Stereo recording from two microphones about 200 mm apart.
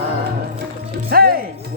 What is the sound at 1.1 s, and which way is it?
Speech, 50° right (ahead or behind).